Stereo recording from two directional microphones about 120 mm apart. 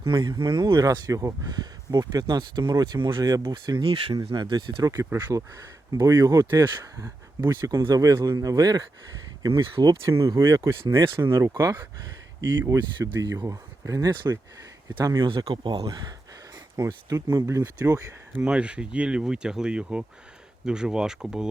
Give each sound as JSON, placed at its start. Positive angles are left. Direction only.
{"t": 0.0, "sound": "speech", "side_deg": -40}
{"t": 5.3, "sound": "speech", "side_deg": -25}
{"t": 9.7, "sound": "speech", "side_deg": -40}
{"t": 10.1, "sound": "speech", "side_deg": -25}
{"t": 13.0, "sound": "speech", "side_deg": -20}
{"t": 14.9, "sound": "speech", "side_deg": -35}
{"t": 15.9, "sound": "speech", "side_deg": -30}
{"t": 18.3, "sound": "speech", "side_deg": -10}